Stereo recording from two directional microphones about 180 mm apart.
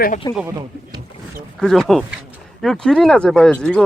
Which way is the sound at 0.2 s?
20° left (ahead or behind).